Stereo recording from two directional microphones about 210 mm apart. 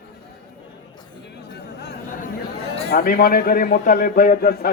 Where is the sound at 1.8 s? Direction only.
50° left (ahead or behind).